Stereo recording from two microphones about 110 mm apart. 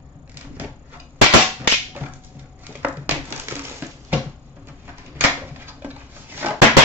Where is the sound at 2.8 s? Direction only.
15° right (ahead or behind).